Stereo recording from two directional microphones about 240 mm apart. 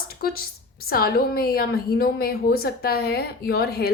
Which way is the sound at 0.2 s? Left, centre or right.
Left.